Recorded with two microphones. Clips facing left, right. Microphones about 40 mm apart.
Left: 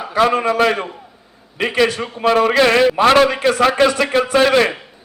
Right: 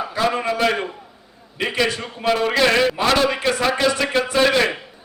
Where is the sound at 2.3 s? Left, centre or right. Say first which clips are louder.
Left 4 dB; left.